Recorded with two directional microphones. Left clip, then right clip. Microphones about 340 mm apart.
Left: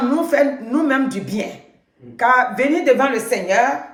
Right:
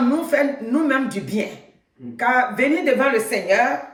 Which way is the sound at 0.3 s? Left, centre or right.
Centre.